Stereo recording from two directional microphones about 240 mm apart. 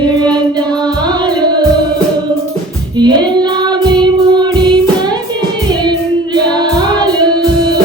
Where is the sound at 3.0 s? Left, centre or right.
Centre.